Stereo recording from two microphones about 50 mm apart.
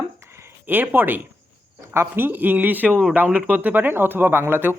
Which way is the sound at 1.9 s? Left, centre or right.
Right.